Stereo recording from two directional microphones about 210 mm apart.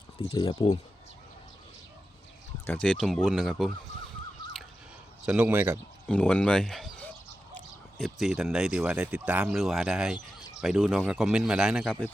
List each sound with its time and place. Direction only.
0.2 s speech: 25° left (ahead or behind)
2.6 s speech: 5° left (ahead or behind)
5.2 s speech: 5° right (ahead or behind)
6.1 s speech: 5° left (ahead or behind)